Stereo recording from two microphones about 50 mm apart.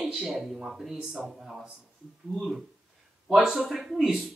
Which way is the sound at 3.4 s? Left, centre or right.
Centre.